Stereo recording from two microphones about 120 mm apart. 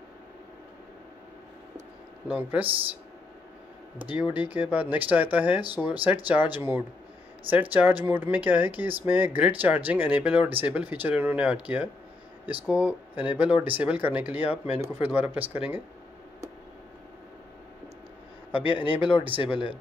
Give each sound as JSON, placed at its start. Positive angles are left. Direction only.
{"t": 2.2, "sound": "speech", "side_deg": -10}
{"t": 4.0, "sound": "speech", "side_deg": -15}
{"t": 18.7, "sound": "speech", "side_deg": 45}